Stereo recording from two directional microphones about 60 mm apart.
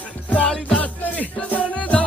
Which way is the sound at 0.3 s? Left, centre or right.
Left.